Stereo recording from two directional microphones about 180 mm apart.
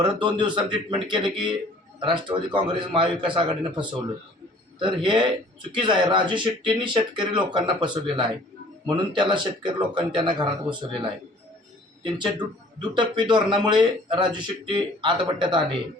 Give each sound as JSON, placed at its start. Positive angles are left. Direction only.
{"t": 0.0, "sound": "a man's voice", "side_deg": -25}